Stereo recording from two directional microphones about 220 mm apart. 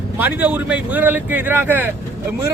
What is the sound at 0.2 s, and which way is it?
Speech, 10° right (ahead or behind).